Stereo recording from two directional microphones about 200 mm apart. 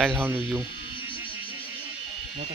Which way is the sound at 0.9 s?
25° left (ahead or behind).